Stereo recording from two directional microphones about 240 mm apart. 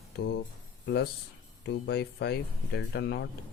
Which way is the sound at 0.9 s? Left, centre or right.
Left.